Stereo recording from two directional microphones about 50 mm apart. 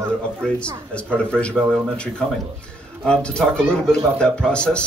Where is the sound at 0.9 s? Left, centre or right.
Left.